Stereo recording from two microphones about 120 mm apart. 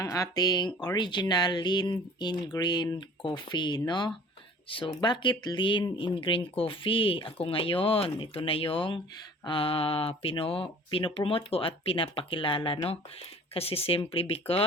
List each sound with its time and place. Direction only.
0.0 s speech: 30° left (ahead or behind); by 14.6 s 55° left (ahead or behind)